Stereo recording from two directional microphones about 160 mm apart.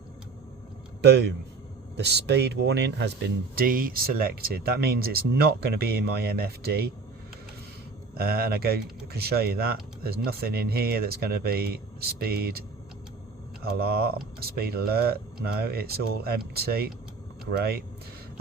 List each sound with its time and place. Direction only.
1.0 s speech: 90° right
8.1 s speech: 75° right (ahead or behind)